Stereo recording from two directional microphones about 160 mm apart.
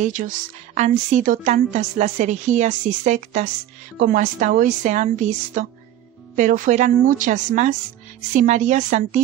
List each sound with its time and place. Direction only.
0.0 s a woman's voice: 55° right (ahead or behind)